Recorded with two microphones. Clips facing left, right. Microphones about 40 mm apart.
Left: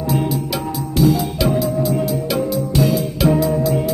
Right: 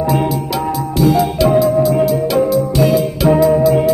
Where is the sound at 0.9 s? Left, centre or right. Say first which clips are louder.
Right 3 dB; centre.